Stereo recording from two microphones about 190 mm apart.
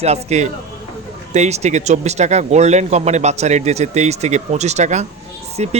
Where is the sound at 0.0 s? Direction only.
35° right (ahead or behind).